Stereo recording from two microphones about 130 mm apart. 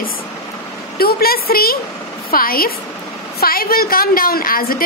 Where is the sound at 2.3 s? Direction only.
90° left.